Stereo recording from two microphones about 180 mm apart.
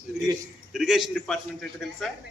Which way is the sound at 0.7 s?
Centre (ahead or behind).